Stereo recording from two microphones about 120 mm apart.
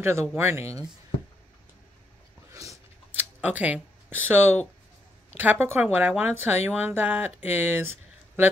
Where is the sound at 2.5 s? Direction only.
25° right (ahead or behind).